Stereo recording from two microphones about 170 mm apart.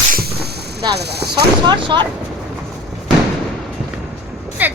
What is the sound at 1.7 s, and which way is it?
Speech, 25° right (ahead or behind).